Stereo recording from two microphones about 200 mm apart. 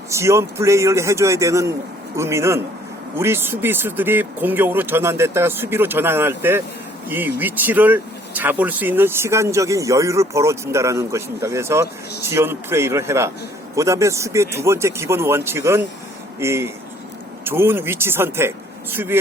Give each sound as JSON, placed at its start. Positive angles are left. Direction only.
{"t": 0.1, "sound": "speech", "side_deg": -15}